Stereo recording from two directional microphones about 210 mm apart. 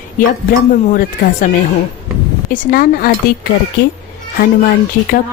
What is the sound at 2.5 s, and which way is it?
Speech, 40° left (ahead or behind).